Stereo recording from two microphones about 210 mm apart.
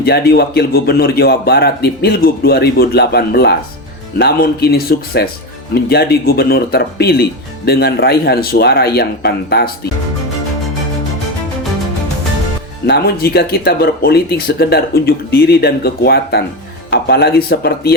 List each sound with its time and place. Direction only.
0.0 s speech: 50° left (ahead or behind)
12.9 s speech: 50° left (ahead or behind)